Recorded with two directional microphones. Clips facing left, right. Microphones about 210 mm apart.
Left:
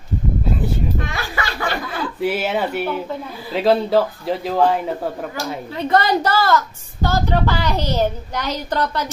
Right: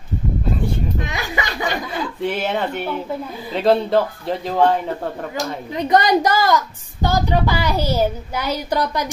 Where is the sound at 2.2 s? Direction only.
5° left (ahead or behind).